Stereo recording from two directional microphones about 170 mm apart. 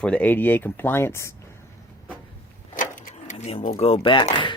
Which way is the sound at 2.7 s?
50° left (ahead or behind).